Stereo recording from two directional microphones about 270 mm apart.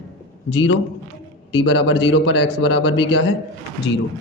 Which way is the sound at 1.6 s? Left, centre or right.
Left.